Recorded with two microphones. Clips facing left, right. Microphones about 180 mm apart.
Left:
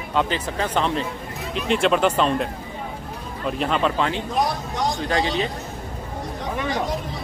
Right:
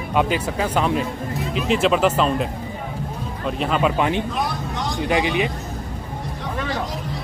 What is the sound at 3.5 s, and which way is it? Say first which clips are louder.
Speech: right 1 dB; centre (ahead or behind).